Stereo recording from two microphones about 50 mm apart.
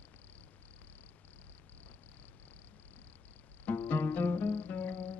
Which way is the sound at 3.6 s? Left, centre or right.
Left.